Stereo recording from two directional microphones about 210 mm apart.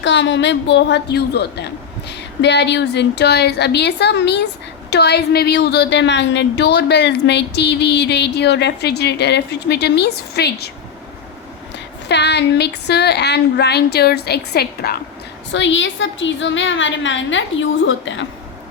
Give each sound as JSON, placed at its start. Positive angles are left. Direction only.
{"t": 0.0, "sound": "a woman's voice", "side_deg": 60}
{"t": 12.0, "sound": "a woman's voice", "side_deg": 55}
{"t": 15.5, "sound": "a woman's voice", "side_deg": 60}